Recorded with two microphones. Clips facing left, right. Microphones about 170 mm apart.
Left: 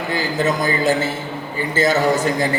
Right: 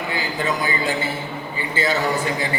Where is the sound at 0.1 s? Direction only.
45° left (ahead or behind).